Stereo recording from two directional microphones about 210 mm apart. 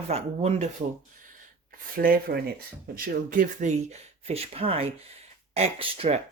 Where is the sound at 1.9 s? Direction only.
45° right (ahead or behind).